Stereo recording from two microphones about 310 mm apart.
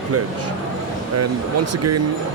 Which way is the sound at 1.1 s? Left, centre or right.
Right.